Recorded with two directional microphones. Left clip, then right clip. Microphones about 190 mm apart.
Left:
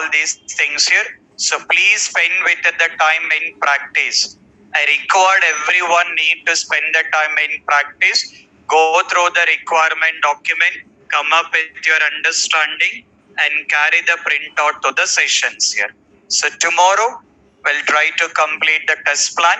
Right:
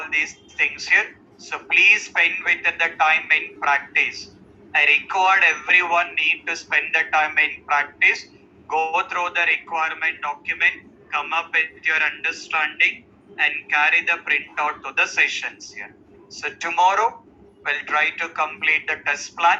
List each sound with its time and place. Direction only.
0.0 s speech: 50° left (ahead or behind)